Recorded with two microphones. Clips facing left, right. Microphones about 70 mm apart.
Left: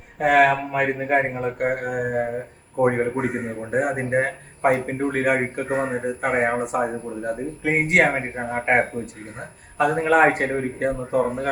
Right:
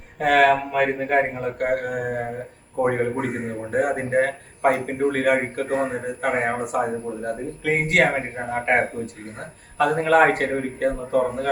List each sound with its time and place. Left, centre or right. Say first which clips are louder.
0.2 s speech: even; centre
1.4 s speech: even; centre